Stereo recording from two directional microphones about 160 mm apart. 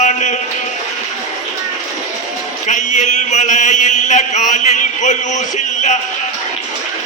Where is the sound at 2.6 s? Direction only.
50° left (ahead or behind).